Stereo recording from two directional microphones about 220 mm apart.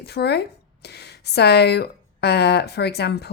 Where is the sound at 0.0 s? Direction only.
45° left (ahead or behind).